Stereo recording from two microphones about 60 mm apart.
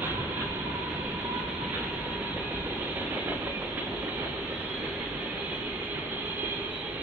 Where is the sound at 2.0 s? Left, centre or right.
Right.